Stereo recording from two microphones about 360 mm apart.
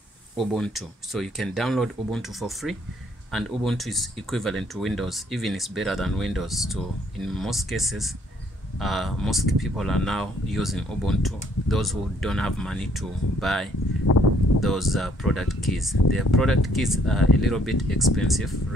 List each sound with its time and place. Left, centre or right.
0.4 s speech: centre
14.1 s a sound: left
14.6 s speech: centre